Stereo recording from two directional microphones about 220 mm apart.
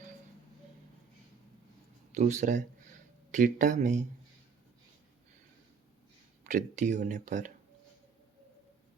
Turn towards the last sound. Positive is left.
turn(degrees=-35)  # may be behind; listen again after turning